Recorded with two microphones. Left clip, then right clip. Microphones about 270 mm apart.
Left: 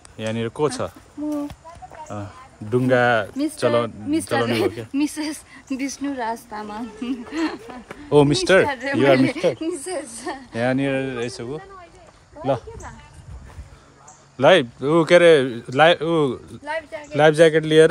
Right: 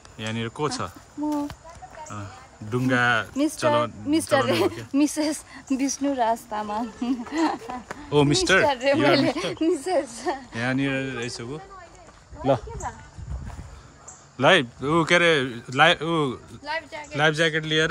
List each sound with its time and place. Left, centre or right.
0.2 s speech: centre
2.0 s speech: centre
4.1 s a woman's voice: right
4.9 s speech: right
6.1 s a woman's voice: right
7.1 s speech: right
7.9 s speech: centre
8.6 s a woman's voice: right
10.1 s a woman's voice: right
10.6 s speech: centre
12.4 s a woman's voice: right
14.3 s speech: centre
16.6 s speech: left
17.1 s speech: centre